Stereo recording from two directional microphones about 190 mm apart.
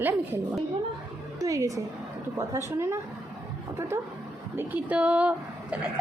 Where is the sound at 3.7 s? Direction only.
15° right (ahead or behind).